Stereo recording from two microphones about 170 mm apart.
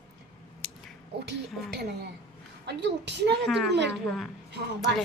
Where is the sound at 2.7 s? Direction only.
90° right.